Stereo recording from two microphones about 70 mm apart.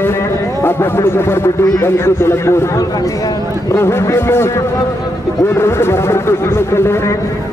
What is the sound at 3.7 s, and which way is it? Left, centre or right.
A man's voice, left.